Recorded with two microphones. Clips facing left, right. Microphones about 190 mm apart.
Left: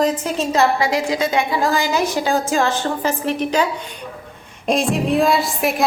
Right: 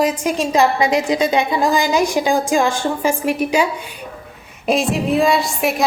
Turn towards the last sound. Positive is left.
turn(degrees=0)  # may be behind; listen again after turning